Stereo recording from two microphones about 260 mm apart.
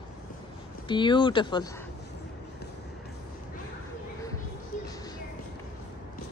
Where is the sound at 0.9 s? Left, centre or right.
Centre.